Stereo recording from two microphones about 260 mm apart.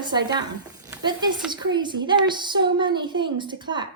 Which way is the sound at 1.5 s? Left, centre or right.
Centre.